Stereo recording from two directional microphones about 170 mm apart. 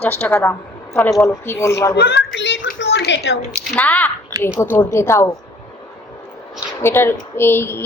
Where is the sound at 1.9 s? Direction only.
70° left (ahead or behind); by 3.4 s 90° left.